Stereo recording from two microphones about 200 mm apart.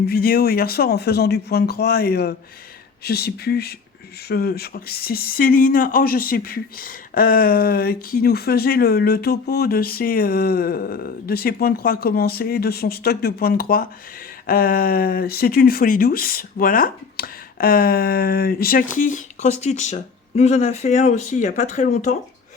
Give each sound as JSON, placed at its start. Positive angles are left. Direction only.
{"t": 0.1, "sound": "speech", "side_deg": 50}